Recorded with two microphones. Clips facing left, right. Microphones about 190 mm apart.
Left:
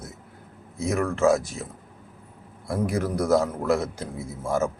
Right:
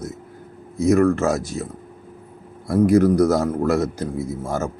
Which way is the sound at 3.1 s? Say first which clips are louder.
Right 5 dB; 40° right (ahead or behind).